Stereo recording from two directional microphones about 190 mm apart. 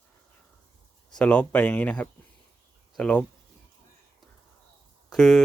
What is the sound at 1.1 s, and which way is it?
Speech, 5° left (ahead or behind).